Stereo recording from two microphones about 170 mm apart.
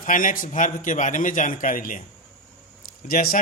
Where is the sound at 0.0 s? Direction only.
50° left (ahead or behind).